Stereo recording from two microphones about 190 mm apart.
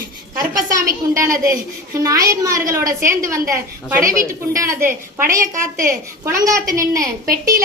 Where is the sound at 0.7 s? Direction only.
15° right (ahead or behind).